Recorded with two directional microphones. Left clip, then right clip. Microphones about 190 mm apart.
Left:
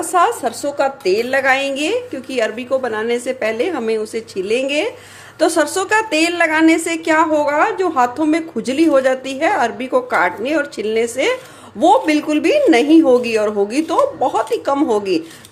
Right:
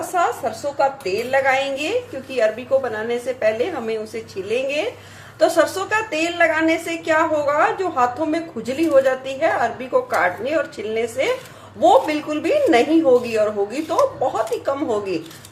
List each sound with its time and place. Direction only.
0.1 s a woman's voice: 55° left (ahead or behind)